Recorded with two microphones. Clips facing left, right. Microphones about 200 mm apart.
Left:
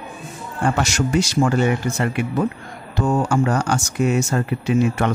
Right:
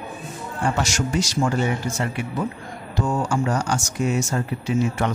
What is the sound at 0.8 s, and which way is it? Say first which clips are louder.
A man's voice: left 4 dB; 60° left (ahead or behind).